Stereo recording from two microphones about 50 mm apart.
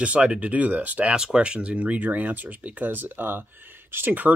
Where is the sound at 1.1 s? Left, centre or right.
Centre.